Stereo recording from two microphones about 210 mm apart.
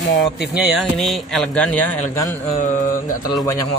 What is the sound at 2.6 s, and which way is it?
Mantra, 40° left (ahead or behind).